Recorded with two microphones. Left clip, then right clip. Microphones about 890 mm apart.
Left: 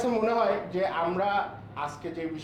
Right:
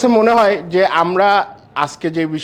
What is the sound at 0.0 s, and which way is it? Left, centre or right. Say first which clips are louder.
A man's voice: right 14 dB; right.